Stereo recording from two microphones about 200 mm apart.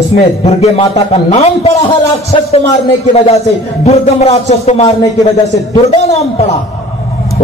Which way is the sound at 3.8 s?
35° left (ahead or behind).